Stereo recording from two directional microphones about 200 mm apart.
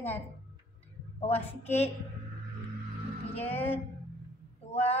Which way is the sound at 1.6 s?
30° left (ahead or behind).